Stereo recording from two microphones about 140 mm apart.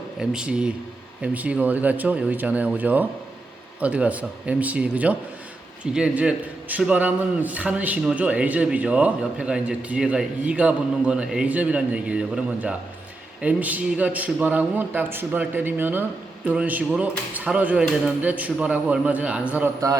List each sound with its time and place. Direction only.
0.2 s a man's voice: 5° right (ahead or behind)